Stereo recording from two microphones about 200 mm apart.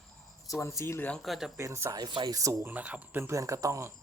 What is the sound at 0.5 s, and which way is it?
Speech, 15° left (ahead or behind).